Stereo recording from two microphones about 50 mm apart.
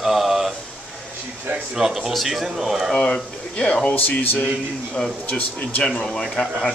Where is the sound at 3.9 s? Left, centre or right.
Left.